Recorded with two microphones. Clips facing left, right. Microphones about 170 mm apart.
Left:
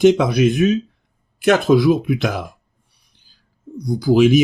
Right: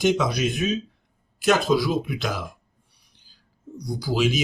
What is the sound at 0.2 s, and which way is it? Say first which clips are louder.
Speech: left 8 dB; 55° left (ahead or behind).